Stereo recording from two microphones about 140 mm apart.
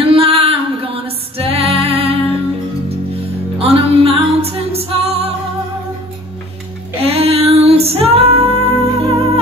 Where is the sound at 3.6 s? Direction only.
45° right (ahead or behind).